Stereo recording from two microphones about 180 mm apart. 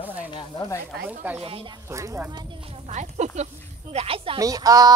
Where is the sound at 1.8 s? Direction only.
15° right (ahead or behind).